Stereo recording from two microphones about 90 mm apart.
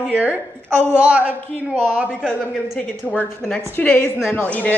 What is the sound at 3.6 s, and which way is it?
A woman's voice, 20° left (ahead or behind).